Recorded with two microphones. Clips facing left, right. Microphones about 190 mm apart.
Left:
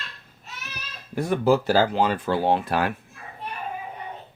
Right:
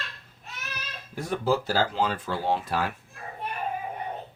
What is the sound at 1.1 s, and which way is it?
Speech, 65° left (ahead or behind).